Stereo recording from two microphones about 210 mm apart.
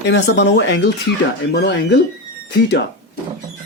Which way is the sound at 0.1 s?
55° left (ahead or behind).